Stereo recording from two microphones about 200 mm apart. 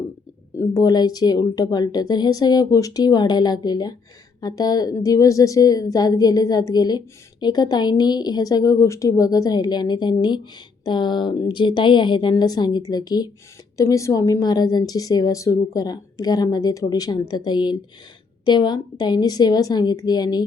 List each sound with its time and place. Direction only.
0.7 s a woman's voice: 20° left (ahead or behind)